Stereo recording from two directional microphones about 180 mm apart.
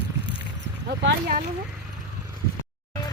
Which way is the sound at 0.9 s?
55° right (ahead or behind).